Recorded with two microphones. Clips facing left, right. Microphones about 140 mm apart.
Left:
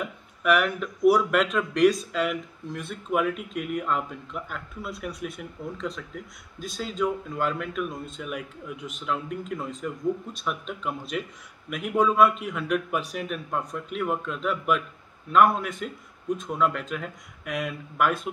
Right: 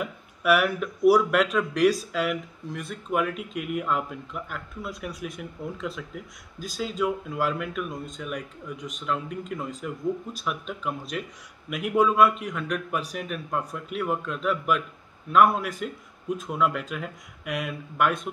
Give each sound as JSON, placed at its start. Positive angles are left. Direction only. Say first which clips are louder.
{"t": 0.0, "sound": "speech", "louder": "right 1 dB", "side_deg": -5}